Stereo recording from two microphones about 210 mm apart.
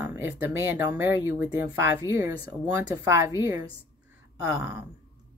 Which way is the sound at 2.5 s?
10° right (ahead or behind).